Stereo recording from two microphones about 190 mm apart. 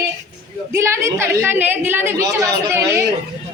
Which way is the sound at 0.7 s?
15° right (ahead or behind).